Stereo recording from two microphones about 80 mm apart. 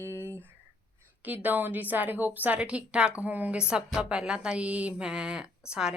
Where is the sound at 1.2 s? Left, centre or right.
Right.